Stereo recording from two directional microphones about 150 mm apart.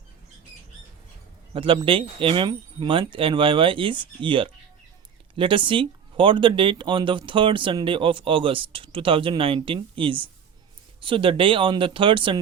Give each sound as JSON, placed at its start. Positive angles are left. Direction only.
{"t": 1.5, "sound": "speech", "side_deg": -35}